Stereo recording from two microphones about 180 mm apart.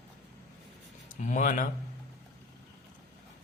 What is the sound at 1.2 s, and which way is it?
Speech, 45° left (ahead or behind).